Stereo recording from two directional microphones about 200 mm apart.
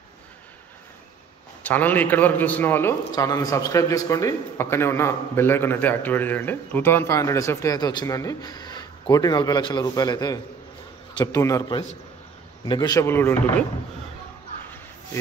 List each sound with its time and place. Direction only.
1.6 s a man's voice: 10° left (ahead or behind)